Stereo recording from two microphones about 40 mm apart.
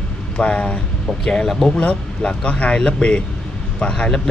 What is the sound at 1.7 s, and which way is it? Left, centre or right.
Speech, left.